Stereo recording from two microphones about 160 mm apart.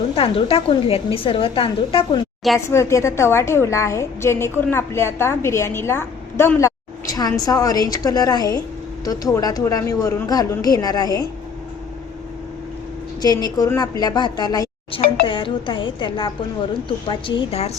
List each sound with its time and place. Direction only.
0.2 s a woman's voice: 35° left (ahead or behind)
2.6 s a woman's voice: 15° left (ahead or behind)
13.2 s a woman's voice: 25° left (ahead or behind); by 17.7 s 40° left (ahead or behind)